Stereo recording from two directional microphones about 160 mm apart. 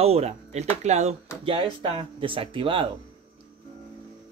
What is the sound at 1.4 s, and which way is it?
Speech, 35° right (ahead or behind).